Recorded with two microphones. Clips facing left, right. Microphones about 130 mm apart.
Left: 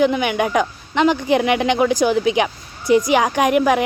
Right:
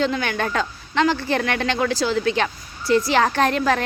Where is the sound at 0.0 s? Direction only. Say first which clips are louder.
Left 5 dB; 15° left (ahead or behind).